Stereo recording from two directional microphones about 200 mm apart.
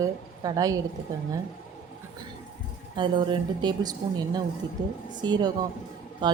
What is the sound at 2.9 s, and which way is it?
A woman's voice, 20° right (ahead or behind).